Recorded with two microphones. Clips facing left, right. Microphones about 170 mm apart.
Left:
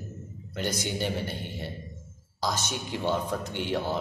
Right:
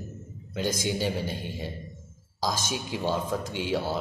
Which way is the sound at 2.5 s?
90° right.